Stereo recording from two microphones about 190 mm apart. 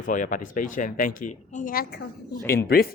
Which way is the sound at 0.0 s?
45° left (ahead or behind).